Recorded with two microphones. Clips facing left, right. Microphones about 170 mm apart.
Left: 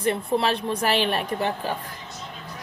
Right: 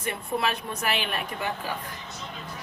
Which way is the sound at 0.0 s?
30° left (ahead or behind).